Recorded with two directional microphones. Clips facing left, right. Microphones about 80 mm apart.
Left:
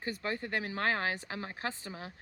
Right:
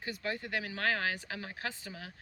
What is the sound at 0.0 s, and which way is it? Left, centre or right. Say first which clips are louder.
Speech: left 2 dB; left.